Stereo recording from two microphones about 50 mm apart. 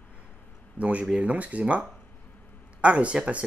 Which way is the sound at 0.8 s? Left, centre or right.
Right.